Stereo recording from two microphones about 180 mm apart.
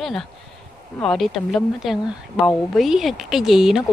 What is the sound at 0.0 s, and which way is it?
A woman's voice, centre (ahead or behind).